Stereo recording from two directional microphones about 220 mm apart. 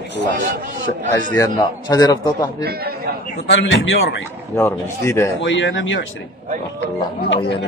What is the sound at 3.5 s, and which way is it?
Speech, 55° left (ahead or behind).